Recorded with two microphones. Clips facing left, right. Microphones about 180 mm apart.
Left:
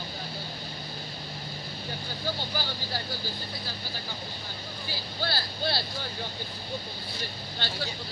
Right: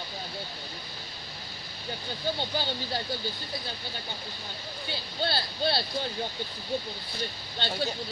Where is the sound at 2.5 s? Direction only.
25° right (ahead or behind).